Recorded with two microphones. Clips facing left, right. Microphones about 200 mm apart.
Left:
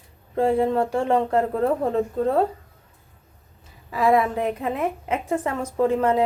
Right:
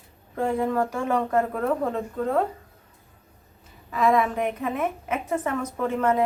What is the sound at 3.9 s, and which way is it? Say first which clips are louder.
Speech: left 2 dB; 30° left (ahead or behind).